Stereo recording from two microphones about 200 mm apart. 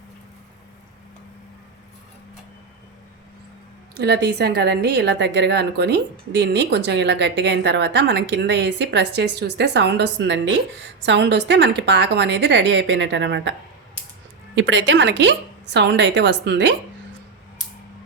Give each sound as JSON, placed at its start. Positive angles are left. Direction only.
{"t": 3.9, "sound": "a woman's voice", "side_deg": -55}